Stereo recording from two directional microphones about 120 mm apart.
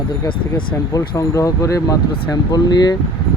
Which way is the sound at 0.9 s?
30° left (ahead or behind).